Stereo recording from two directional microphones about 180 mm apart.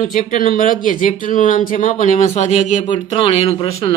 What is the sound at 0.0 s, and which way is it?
Speech, 45° left (ahead or behind).